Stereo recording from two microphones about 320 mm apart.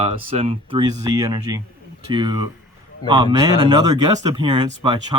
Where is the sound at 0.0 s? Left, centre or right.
Centre.